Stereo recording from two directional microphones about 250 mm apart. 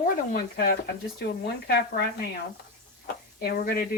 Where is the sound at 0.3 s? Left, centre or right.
Left.